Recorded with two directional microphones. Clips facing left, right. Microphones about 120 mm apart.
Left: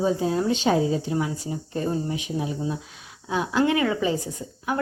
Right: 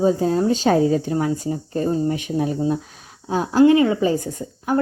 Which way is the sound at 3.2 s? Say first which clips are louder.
Right 4 dB; 40° right (ahead or behind).